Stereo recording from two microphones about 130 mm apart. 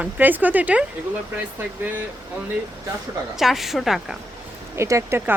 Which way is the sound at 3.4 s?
Centre (ahead or behind).